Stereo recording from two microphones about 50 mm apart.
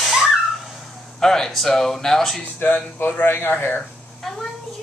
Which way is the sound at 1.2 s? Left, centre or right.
Centre.